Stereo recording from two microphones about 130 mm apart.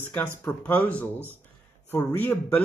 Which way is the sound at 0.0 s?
10° left (ahead or behind).